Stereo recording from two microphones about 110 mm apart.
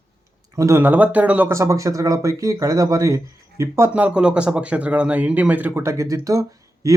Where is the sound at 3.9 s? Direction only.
10° right (ahead or behind).